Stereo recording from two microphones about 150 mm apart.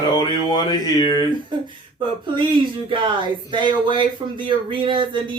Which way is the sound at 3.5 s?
35° right (ahead or behind).